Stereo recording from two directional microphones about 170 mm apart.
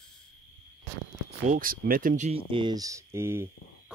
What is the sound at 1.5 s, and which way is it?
Speech, 55° right (ahead or behind).